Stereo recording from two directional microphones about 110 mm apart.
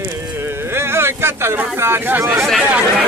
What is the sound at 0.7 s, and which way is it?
Speech, 25° right (ahead or behind).